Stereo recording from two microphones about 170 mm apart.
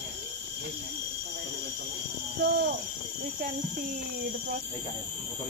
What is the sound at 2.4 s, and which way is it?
Speech, 75° right (ahead or behind).